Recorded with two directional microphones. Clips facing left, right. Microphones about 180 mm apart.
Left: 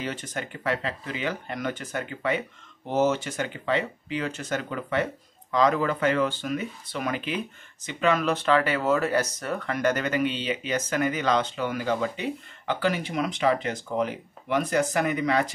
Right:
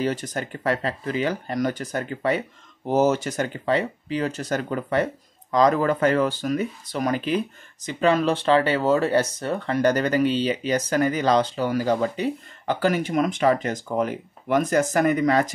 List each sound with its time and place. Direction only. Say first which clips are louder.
0.0 s speech: right 7 dB; 40° right (ahead or behind)